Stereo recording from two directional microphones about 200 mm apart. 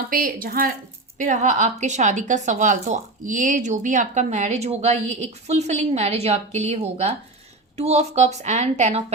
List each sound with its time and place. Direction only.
0.1 s a woman's voice: 45° right (ahead or behind)